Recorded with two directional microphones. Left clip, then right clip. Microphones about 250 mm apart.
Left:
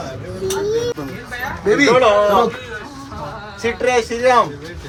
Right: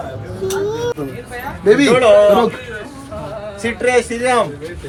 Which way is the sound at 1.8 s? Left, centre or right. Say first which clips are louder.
Right 1 dB; left.